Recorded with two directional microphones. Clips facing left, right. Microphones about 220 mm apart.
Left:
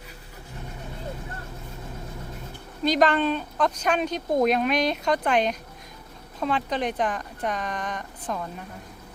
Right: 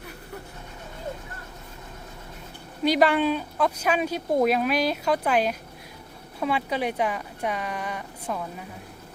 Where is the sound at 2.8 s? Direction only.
10° right (ahead or behind).